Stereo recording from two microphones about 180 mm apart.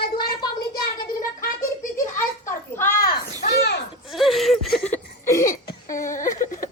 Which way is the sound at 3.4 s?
65° left (ahead or behind).